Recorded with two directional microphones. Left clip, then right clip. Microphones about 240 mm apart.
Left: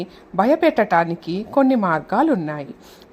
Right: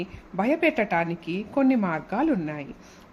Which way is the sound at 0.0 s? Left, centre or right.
Left.